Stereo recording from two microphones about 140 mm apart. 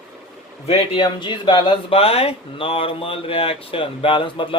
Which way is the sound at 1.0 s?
35° left (ahead or behind).